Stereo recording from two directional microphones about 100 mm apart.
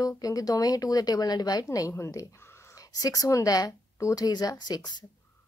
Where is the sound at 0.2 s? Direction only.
35° left (ahead or behind).